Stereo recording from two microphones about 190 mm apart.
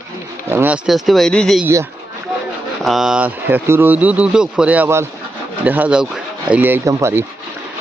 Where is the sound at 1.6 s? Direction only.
15° right (ahead or behind).